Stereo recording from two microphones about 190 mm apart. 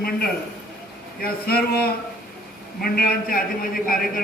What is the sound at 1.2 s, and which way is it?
A man's voice, 55° left (ahead or behind).